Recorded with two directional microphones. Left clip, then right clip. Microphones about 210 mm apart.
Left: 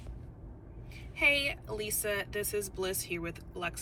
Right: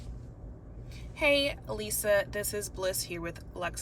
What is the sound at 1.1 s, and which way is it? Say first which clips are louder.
Speech: right 1 dB; 50° right (ahead or behind).